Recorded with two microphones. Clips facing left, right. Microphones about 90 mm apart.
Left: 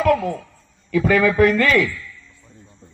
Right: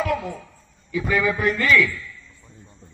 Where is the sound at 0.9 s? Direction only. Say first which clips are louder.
Left 5 dB; 70° left (ahead or behind); by 1.9 s 55° left (ahead or behind).